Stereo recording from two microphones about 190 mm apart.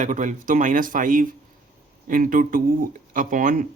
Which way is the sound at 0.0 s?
40° right (ahead or behind).